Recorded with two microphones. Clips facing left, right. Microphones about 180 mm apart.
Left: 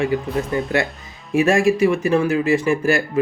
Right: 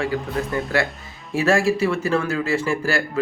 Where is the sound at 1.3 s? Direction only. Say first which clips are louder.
Left 3 dB; 15° left (ahead or behind).